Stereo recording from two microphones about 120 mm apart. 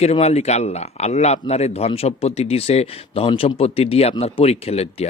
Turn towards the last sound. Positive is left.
turn(degrees=60)  # may be behind; listen again after turning